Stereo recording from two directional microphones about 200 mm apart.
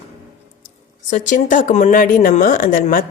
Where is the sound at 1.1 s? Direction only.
40° left (ahead or behind).